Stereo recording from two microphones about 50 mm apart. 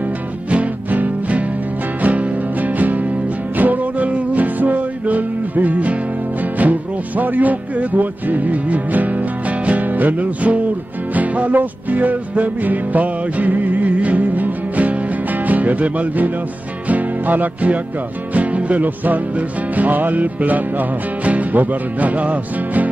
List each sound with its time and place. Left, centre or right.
0.5 s music: right